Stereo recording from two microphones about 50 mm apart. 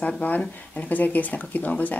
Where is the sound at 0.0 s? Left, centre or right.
Left.